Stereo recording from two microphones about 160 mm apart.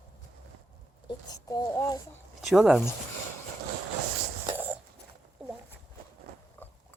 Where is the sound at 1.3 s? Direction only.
20° left (ahead or behind).